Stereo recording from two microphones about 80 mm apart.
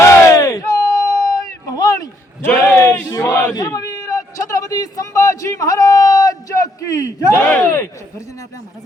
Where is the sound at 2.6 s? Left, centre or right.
Left.